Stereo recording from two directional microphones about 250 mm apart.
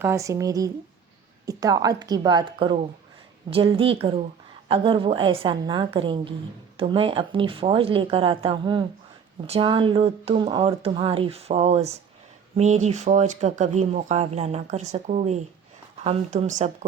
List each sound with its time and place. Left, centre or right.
0.0 s a woman's voice: centre; by 16.7 s right